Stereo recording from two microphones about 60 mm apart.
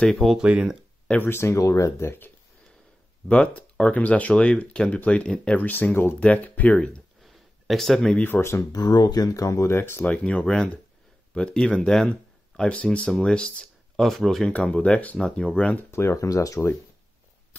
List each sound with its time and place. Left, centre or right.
0.4 s speech: centre
1.2 s speech: left
3.3 s speech: left
5.6 s speech: left
6.1 s speech: left
7.2 s a sound: centre
8.4 s speech: left
8.7 s speech: left
9.8 s speech: left
10.0 s speech: centre
13.9 s speech: centre
14.7 s speech: left
15.9 s speech: left
16.2 s speech: left